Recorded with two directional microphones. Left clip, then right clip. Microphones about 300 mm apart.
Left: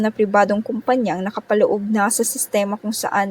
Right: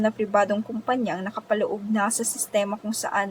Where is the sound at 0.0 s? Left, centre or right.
Left.